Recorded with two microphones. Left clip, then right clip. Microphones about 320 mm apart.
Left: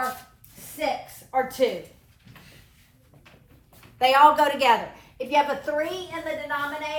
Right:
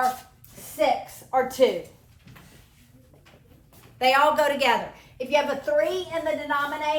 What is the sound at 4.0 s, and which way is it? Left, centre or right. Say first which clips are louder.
A woman's voice: left 3 dB; centre.